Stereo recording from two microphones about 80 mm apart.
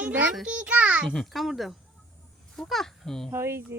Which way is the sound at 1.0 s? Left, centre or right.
Centre.